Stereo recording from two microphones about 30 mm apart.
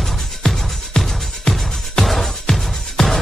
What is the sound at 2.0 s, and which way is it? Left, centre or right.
Music, centre.